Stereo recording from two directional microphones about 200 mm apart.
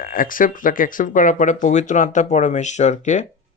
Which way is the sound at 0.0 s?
45° left (ahead or behind).